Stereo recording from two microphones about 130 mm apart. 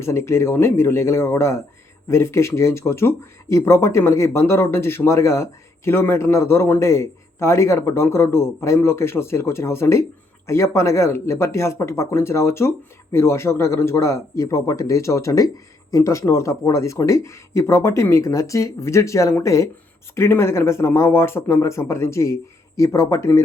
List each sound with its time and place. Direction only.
0.0 s speech: 20° left (ahead or behind)